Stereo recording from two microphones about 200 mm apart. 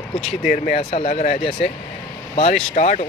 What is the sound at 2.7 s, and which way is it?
Speech, 35° left (ahead or behind).